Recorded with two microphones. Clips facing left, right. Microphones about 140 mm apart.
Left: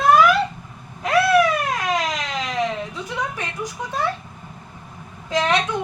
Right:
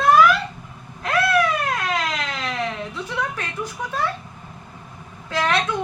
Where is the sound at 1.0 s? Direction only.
15° left (ahead or behind).